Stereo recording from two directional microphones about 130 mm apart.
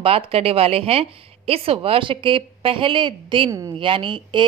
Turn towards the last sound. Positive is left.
turn(degrees=-40)  # may be behind; listen again after turning